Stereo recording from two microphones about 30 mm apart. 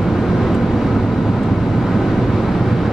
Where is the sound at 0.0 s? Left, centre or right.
Centre.